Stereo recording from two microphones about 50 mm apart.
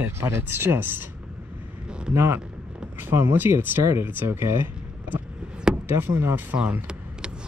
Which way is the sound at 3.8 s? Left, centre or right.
Right.